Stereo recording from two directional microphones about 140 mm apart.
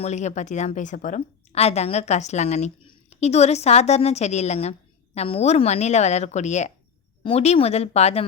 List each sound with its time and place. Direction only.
0.0 s speech: 55° left (ahead or behind)
1.5 s a woman's voice: 50° left (ahead or behind)